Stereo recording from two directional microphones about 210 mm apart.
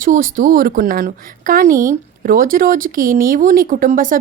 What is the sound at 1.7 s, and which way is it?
Speech, 15° right (ahead or behind).